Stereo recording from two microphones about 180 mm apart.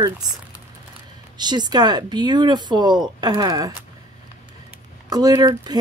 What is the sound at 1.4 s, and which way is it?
Speech, 25° right (ahead or behind).